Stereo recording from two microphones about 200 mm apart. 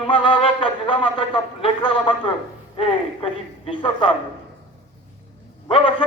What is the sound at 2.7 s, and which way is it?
A man's voice, 30° left (ahead or behind).